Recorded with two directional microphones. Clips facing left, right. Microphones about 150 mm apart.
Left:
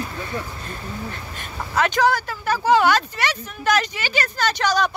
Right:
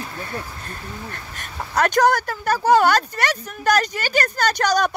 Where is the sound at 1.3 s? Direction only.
45° right (ahead or behind).